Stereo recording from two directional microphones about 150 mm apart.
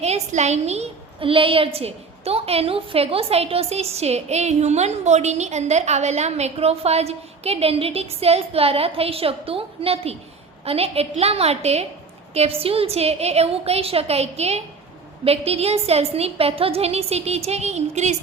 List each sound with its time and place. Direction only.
0.0 s a woman's voice: 45° right (ahead or behind)